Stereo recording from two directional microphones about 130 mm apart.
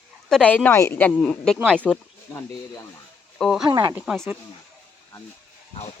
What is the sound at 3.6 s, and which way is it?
Speech, 35° right (ahead or behind).